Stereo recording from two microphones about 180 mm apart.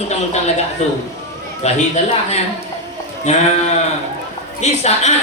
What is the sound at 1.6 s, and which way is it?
Speech, 40° left (ahead or behind).